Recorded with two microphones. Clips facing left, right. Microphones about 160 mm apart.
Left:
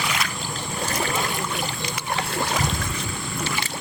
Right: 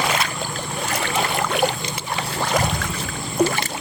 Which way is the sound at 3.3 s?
55° right (ahead or behind).